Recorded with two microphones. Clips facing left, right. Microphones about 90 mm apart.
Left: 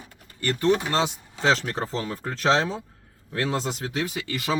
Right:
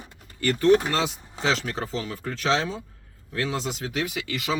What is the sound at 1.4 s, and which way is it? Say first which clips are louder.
Speech: left 3 dB; 40° left (ahead or behind).